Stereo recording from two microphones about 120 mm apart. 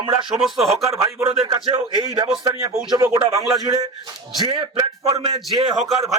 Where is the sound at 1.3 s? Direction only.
35° right (ahead or behind).